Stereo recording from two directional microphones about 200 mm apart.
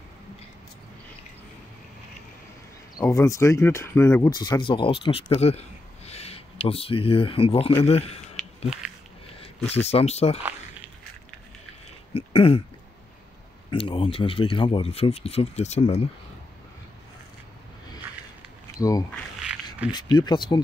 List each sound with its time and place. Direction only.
3.0 s speech: 15° left (ahead or behind)
8.4 s a sound: centre (ahead or behind)
9.8 s speech: 30° left (ahead or behind)
12.1 s throat clearing: 30° left (ahead or behind)
13.7 s speech: 25° left (ahead or behind)
18.8 s speech: 15° left (ahead or behind)
19.8 s speech: 5° right (ahead or behind)
20.2 s speech: 20° left (ahead or behind)